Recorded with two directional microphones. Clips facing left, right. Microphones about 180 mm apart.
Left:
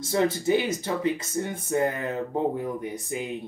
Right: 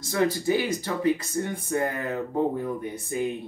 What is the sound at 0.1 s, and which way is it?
Speech, 20° left (ahead or behind).